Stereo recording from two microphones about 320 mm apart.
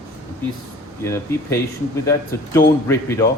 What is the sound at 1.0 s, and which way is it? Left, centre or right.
Speech, centre.